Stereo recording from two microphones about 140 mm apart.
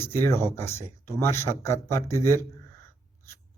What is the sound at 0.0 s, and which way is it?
Speech, 15° left (ahead or behind).